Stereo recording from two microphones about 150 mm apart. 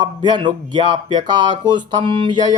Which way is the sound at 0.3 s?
30° right (ahead or behind).